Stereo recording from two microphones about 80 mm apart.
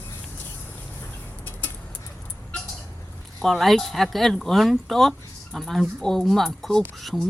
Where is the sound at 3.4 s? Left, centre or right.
Centre.